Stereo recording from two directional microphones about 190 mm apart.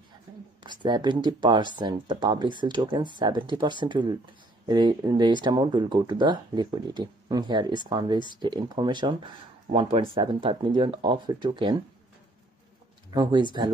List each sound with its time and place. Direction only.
0.7 s speech: 25° right (ahead or behind)
13.1 s speech: 25° right (ahead or behind)